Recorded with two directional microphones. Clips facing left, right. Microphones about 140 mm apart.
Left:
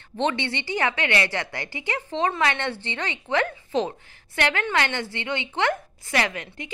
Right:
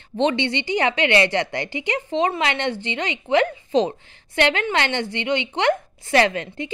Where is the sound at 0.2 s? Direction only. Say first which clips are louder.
Right 5 dB; 20° right (ahead or behind).